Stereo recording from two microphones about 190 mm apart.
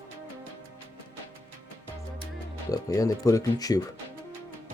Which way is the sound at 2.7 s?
20° left (ahead or behind).